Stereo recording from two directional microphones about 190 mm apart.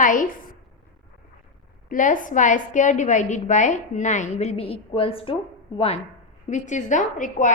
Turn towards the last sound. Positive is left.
turn(degrees=45)  # may be behind; listen again after turning